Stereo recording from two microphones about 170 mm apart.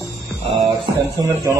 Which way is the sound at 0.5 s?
25° right (ahead or behind).